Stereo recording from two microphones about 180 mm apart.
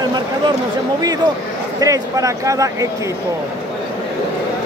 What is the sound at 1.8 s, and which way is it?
Speech, 20° right (ahead or behind).